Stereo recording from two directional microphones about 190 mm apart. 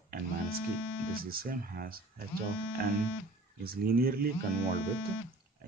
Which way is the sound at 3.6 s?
50° right (ahead or behind).